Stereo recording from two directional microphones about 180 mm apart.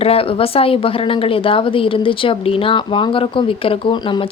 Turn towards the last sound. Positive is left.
turn(degrees=25)  # may be behind; listen again after turning